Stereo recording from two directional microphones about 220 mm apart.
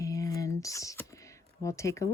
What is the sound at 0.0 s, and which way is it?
Computer keyboard, 15° left (ahead or behind).